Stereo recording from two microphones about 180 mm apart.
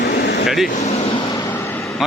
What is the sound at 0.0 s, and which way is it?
Vehicle, 60° left (ahead or behind).